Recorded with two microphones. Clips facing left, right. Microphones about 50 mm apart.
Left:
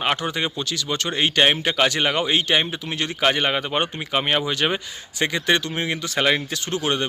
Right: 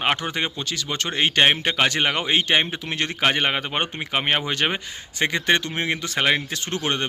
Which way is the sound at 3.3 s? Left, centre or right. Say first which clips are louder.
Left 1 dB; right.